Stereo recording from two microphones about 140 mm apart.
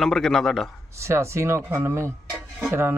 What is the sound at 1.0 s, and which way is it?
Speech, 20° right (ahead or behind).